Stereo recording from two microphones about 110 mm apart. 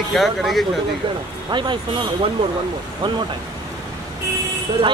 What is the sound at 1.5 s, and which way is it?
Speech, 45° right (ahead or behind).